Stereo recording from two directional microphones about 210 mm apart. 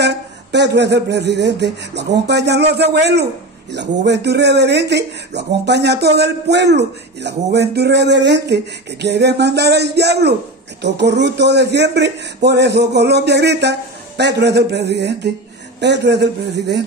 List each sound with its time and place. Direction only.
0.0 s speech: 55° right (ahead or behind)